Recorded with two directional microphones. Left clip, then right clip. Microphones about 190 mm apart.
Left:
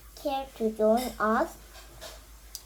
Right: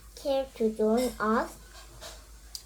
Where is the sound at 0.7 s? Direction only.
20° left (ahead or behind).